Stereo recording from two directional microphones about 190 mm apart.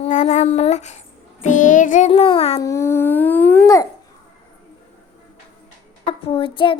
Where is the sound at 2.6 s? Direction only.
15° left (ahead or behind).